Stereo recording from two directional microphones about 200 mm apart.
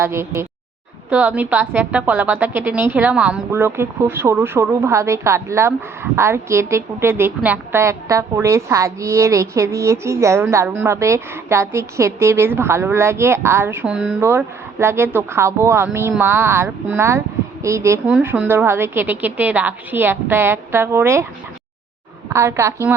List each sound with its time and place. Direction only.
0.0 s a woman's voice: 10° right (ahead or behind)
22.3 s a woman's voice: 15° right (ahead or behind)